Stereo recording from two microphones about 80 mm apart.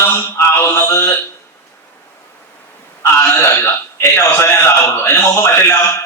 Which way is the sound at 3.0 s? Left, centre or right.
Left.